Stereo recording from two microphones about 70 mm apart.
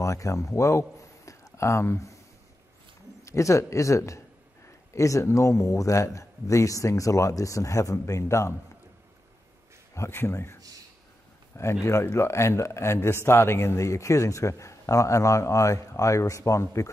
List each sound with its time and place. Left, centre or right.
0.0 s a man's voice: left
3.3 s a man's voice: left
9.9 s speech: left
11.8 s a man's voice: left